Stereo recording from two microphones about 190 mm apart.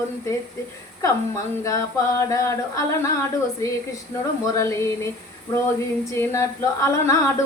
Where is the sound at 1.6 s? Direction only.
15° left (ahead or behind).